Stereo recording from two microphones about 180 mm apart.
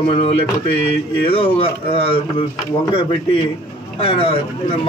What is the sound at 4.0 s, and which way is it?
Speech, 30° left (ahead or behind).